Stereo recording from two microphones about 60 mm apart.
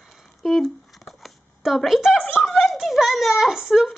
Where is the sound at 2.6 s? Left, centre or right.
Centre.